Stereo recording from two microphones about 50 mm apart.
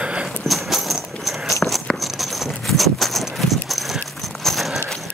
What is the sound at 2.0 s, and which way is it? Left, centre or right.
Clip-clop, centre.